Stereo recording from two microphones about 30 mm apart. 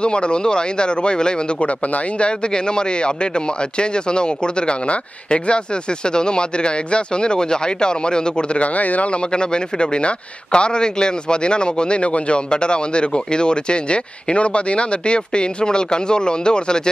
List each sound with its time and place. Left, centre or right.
0.0 s speech: left
8.7 s speech: left
9.1 s speech: left